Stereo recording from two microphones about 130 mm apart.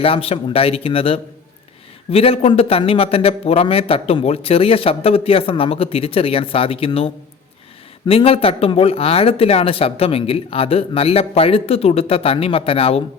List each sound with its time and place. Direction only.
0.0 s a man's voice: 45° left (ahead or behind)